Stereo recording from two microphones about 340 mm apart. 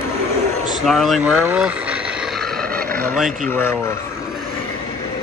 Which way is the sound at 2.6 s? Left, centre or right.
Right.